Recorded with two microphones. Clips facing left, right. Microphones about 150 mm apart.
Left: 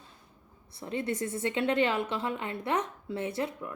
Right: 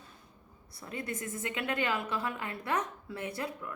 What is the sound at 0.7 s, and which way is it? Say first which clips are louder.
Speech: left 6 dB; 25° left (ahead or behind).